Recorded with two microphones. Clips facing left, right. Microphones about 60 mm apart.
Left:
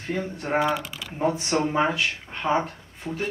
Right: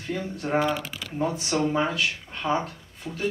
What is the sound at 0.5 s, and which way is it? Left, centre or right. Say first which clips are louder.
Speech: left 1 dB; centre.